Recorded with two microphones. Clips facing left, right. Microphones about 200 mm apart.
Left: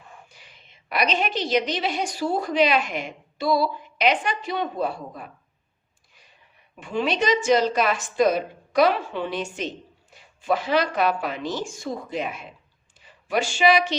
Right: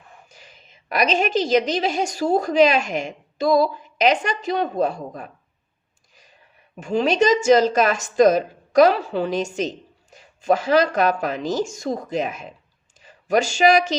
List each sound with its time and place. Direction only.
0.3 s speech: 45° right (ahead or behind)
6.7 s a woman's voice: 40° right (ahead or behind)